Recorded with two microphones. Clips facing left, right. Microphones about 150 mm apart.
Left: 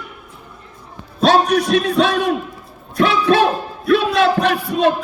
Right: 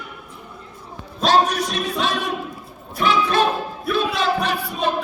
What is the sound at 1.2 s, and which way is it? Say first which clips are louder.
Speech: left 4 dB; 60° left (ahead or behind).